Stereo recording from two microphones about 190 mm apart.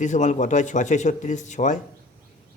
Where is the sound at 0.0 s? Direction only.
40° left (ahead or behind).